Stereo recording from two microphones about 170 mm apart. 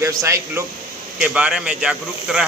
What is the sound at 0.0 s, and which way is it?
Speech, 20° right (ahead or behind).